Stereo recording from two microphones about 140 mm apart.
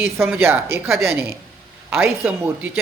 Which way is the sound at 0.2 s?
5° right (ahead or behind).